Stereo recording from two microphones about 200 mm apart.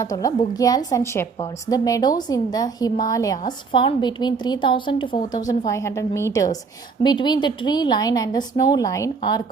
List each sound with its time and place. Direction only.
0.0 s a woman's voice: 15° left (ahead or behind)